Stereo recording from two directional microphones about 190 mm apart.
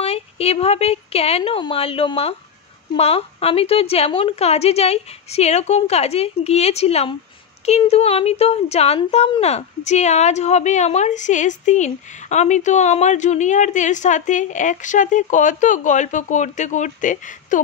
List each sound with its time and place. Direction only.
0.0 s a woman's voice: 30° left (ahead or behind)